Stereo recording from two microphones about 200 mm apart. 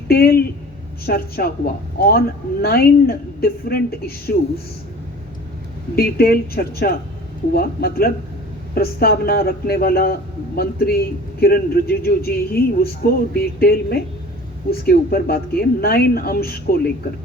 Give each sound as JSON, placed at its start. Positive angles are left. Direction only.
{"t": 0.1, "sound": "a man's voice", "side_deg": 50}
{"t": 6.0, "sound": "a man's voice", "side_deg": 50}